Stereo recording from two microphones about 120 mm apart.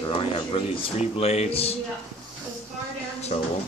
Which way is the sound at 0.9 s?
60° left (ahead or behind).